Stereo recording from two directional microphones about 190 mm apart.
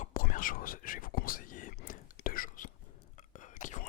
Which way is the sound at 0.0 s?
45° left (ahead or behind).